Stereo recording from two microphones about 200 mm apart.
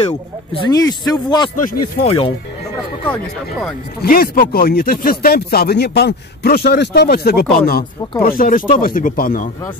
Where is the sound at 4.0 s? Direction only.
45° left (ahead or behind).